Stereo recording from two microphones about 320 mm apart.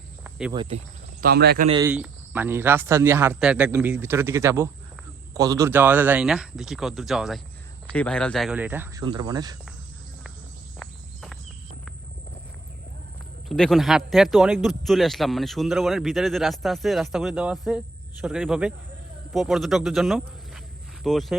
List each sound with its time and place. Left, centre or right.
0.3 s cricket: centre
0.5 s speech: centre
1.2 s a man's voice: right
1.7 s speech: centre
10.8 s cricket: centre
13.5 s speech: centre